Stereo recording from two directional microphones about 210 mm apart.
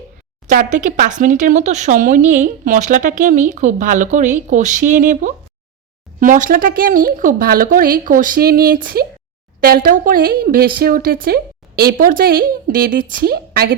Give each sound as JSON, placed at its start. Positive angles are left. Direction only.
{"t": 0.4, "sound": "speech", "side_deg": -40}